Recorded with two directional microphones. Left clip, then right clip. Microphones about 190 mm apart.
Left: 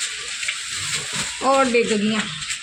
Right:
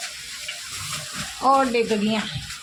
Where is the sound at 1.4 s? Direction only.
10° left (ahead or behind).